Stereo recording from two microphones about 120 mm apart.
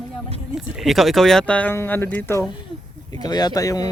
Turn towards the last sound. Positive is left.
turn(degrees=30)  # may be behind; listen again after turning